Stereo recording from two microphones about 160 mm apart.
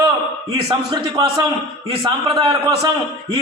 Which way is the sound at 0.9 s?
25° right (ahead or behind).